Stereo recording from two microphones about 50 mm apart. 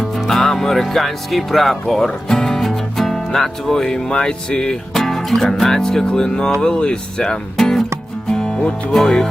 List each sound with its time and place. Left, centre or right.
0.3 s speech: centre
4.9 s music: centre
5.6 s speech: centre
7.5 s music: centre